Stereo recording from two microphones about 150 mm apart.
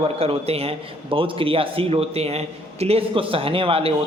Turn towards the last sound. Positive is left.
turn(degrees=-40)  # may be behind; listen again after turning